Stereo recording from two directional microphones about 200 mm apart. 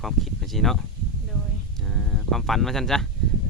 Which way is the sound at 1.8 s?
Centre (ahead or behind).